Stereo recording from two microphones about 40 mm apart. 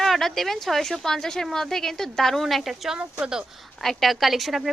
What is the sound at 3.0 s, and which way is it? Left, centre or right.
Speech, right.